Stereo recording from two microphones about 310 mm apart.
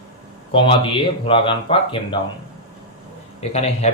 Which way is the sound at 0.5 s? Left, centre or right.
Centre.